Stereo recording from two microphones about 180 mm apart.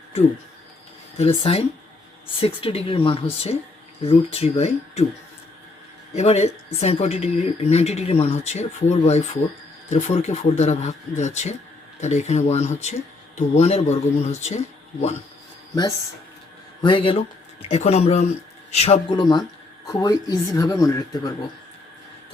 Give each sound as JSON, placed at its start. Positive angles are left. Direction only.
{"t": 1.5, "sound": "a woman's voice", "side_deg": 35}
{"t": 6.1, "sound": "a woman's voice", "side_deg": 35}
{"t": 16.8, "sound": "a woman's voice", "side_deg": 25}